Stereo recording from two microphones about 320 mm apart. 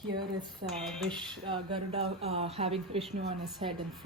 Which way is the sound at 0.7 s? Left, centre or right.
Centre.